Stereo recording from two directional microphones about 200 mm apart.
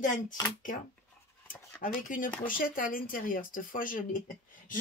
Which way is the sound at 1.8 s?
45° left (ahead or behind).